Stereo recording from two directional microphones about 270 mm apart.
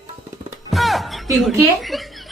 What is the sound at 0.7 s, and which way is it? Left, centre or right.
Music, centre.